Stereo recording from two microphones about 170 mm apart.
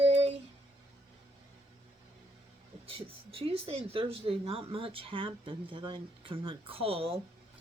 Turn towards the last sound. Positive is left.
turn(degrees=-35)  # may be behind; listen again after turning